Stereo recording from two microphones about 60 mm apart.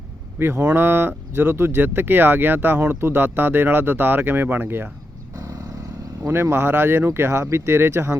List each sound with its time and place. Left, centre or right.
0.3 s speech: right
6.2 s speech: right